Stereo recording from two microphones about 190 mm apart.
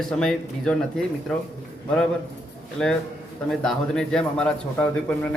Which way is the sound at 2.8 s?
5° left (ahead or behind).